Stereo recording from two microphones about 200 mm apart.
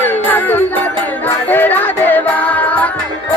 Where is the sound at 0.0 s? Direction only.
10° left (ahead or behind).